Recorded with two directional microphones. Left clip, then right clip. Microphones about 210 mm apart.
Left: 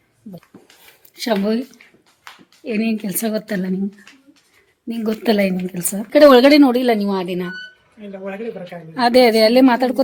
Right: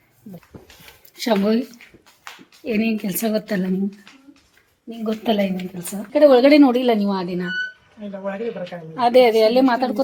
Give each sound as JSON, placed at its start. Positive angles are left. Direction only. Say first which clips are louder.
{"t": 1.1, "sound": "speech", "louder": "even", "side_deg": 10}
{"t": 4.9, "sound": "a woman's voice", "louder": "left 3 dB", "side_deg": 30}
{"t": 6.1, "sound": "speech", "louder": "left 4 dB", "side_deg": 45}
{"t": 6.4, "sound": "a woman's voice", "louder": "left 1 dB", "side_deg": 20}
{"t": 9.0, "sound": "a woman's voice", "louder": "left 1 dB", "side_deg": 20}